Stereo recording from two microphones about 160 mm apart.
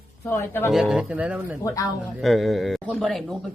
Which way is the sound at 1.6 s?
20° left (ahead or behind).